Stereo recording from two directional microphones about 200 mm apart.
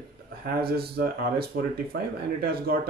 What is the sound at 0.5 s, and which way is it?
Speech, 50° right (ahead or behind).